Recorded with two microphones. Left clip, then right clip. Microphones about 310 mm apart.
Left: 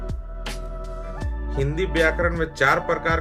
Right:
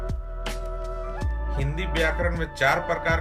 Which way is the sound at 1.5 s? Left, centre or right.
Centre.